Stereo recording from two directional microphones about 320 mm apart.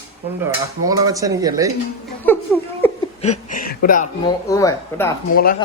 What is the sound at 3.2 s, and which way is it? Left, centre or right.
Speech, left.